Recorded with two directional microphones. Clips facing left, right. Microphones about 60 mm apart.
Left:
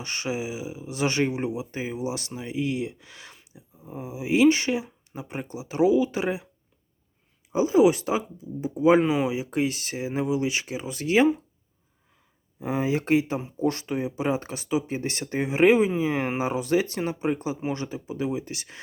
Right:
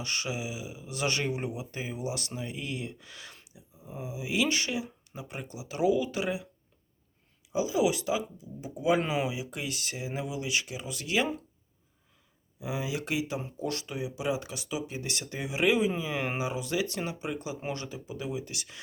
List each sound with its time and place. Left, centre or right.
0.0 s speech: left
7.5 s speech: left
12.5 s speech: left